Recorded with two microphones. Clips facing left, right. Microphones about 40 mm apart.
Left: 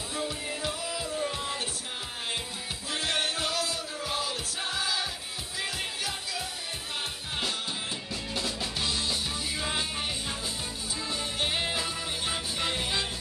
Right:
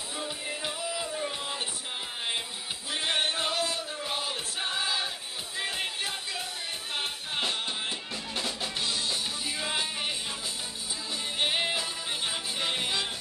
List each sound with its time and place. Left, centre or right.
0.1 s music: centre
2.9 s music: right
8.4 s music: centre
8.9 s music: centre
11.3 s music: centre